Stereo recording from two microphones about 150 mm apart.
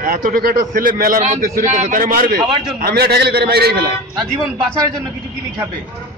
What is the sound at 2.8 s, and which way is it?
A man's voice, 90° right.